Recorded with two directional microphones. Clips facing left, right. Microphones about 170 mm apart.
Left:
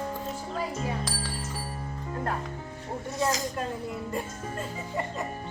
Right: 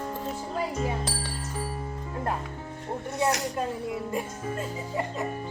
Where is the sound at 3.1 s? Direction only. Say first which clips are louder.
Right 2 dB; 70° right (ahead or behind).